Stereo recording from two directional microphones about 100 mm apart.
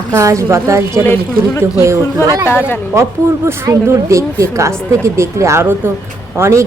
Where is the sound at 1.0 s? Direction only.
20° left (ahead or behind).